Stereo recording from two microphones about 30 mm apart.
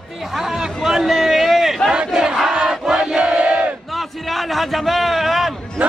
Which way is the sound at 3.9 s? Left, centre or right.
Centre.